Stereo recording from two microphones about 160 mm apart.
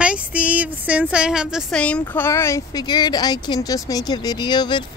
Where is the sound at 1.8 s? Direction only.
10° left (ahead or behind).